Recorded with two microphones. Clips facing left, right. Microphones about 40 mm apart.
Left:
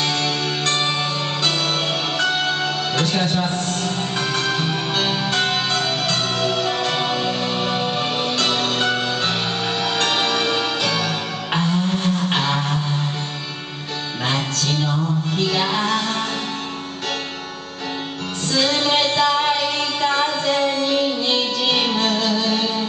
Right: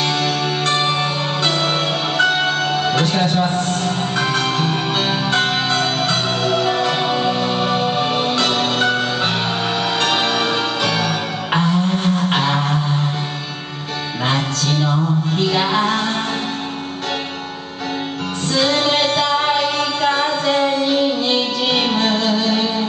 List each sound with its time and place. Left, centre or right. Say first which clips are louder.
0.0 s music: right 3 dB; centre
14.2 s music: right 3 dB; centre
18.5 s music: right 2 dB; centre